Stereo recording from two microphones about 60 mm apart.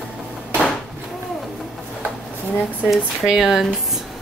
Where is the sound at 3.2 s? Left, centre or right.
Centre.